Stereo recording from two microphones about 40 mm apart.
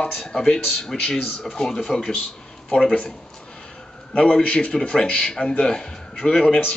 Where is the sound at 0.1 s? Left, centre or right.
Centre.